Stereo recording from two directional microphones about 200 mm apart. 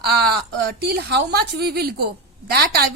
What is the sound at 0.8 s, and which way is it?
A woman's voice, 55° right (ahead or behind).